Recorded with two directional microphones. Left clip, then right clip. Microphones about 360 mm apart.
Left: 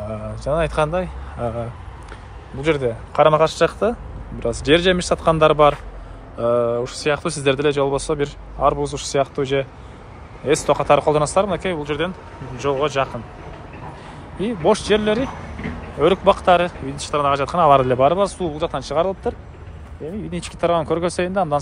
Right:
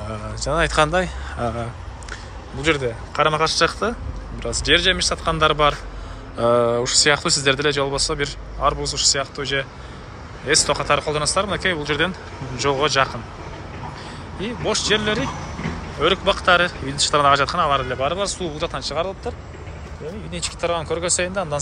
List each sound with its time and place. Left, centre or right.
0.1 s speech: centre
14.7 s speech: centre